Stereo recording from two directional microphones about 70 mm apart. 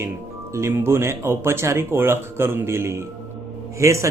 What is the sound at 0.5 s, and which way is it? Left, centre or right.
Speech, right.